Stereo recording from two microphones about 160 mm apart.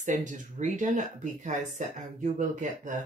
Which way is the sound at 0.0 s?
50° right (ahead or behind).